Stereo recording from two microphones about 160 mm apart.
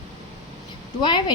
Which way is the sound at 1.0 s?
30° left (ahead or behind).